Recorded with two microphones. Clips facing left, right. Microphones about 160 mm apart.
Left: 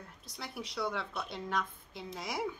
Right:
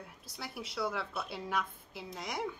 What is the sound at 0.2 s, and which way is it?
A woman's voice, centre (ahead or behind).